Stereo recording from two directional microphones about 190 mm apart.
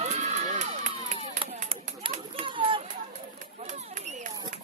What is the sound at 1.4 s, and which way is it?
Chop, 30° right (ahead or behind).